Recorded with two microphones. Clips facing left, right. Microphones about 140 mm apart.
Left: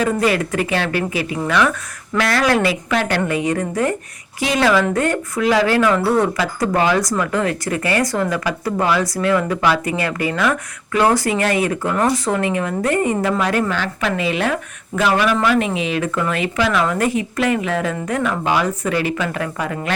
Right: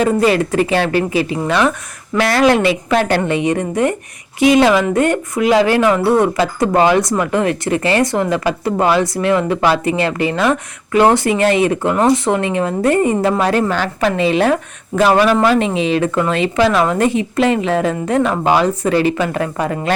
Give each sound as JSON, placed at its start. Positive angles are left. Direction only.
{"t": 0.0, "sound": "speech", "side_deg": -30}